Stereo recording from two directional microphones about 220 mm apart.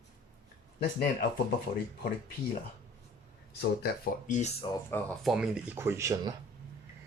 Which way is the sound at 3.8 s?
35° left (ahead or behind).